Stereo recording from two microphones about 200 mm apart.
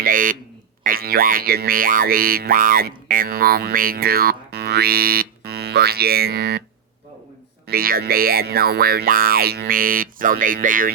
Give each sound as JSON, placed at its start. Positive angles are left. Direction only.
{"t": 0.0, "sound": "speech", "side_deg": -45}
{"t": 7.7, "sound": "speech", "side_deg": -45}